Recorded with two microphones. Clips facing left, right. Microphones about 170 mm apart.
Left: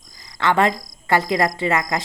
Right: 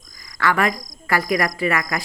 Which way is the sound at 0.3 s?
25° left (ahead or behind).